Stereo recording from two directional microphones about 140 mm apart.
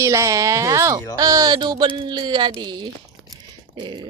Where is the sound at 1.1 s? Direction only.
25° right (ahead or behind).